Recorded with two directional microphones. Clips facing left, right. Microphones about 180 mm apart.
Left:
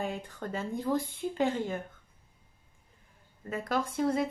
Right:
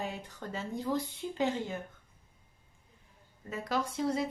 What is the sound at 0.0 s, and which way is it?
Speech, 50° left (ahead or behind).